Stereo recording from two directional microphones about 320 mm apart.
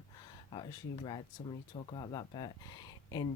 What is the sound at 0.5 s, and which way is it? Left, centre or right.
Speech, centre.